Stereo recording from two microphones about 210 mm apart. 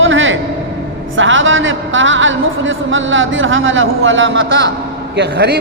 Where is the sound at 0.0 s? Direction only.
65° right (ahead or behind).